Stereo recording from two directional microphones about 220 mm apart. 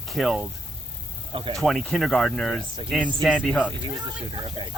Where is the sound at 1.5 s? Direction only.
Centre (ahead or behind).